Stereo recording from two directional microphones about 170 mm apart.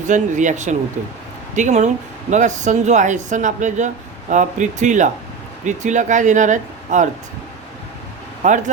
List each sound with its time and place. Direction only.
0.1 s speech: 45° right (ahead or behind)
8.4 s speech: 45° right (ahead or behind)